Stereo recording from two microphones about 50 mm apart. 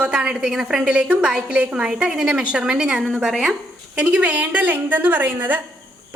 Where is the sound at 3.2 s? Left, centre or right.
Centre.